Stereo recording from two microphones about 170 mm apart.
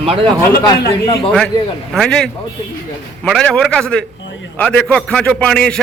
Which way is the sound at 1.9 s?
5° left (ahead or behind).